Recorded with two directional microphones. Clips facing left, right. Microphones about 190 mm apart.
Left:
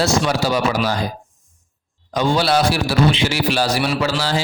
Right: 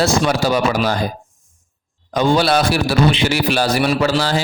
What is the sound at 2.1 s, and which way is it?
A man's voice, 55° right (ahead or behind).